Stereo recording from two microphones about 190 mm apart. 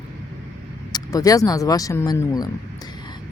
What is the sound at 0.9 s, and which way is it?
Speech, 20° left (ahead or behind).